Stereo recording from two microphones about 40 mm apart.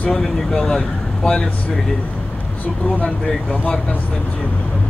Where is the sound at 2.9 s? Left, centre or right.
Left.